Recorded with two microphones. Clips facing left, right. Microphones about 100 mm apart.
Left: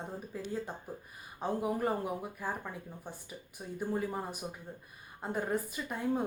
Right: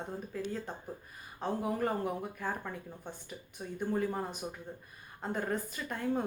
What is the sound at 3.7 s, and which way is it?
A woman's voice, 5° left (ahead or behind).